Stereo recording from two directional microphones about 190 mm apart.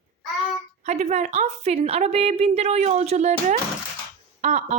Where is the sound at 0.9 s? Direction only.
35° right (ahead or behind).